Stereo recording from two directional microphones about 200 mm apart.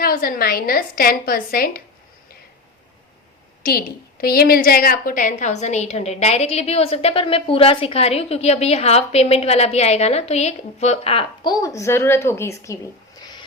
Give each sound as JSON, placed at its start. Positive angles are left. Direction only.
{"t": 0.0, "sound": "a woman's voice", "side_deg": 45}
{"t": 3.6, "sound": "a woman's voice", "side_deg": 50}